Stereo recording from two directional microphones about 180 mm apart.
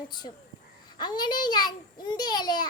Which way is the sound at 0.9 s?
25° left (ahead or behind).